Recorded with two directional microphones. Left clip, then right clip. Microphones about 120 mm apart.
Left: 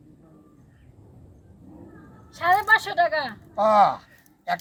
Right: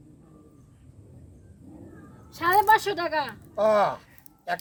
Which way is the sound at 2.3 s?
35° right (ahead or behind).